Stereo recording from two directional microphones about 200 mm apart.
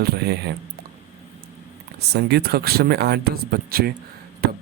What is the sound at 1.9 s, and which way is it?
Speech, 55° right (ahead or behind).